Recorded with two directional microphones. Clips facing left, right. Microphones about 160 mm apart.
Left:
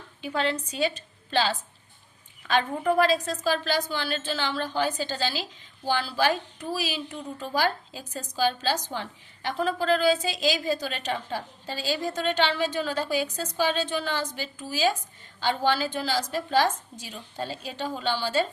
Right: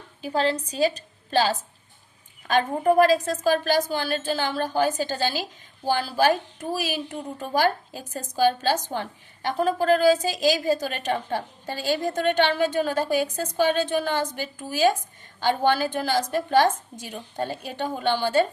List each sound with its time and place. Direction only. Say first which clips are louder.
0.2 s a woman's voice: right 4 dB; 35° right (ahead or behind); by 18.4 s 55° right (ahead or behind)